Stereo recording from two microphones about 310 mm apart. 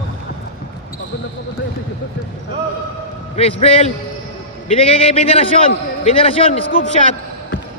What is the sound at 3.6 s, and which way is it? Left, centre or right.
A man's voice, centre.